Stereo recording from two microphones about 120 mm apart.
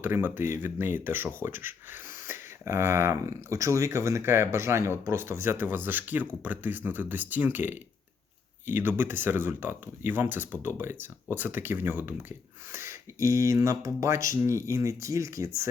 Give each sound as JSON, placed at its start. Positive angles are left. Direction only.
{"t": 0.0, "sound": "speech", "side_deg": -15}